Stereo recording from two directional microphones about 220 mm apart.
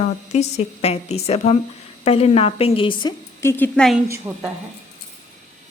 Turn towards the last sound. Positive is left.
turn(degrees=-10)  # may be behind; listen again after turning